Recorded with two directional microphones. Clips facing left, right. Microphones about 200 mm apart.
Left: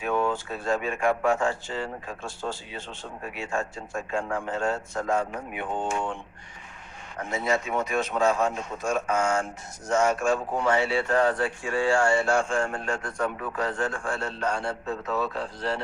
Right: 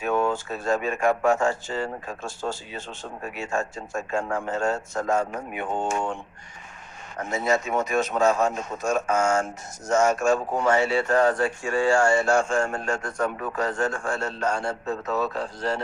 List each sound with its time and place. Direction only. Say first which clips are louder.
0.0 s a man's voice: right 2 dB; 45° right (ahead or behind)
7.2 s a man's voice: right 3 dB; 45° right (ahead or behind)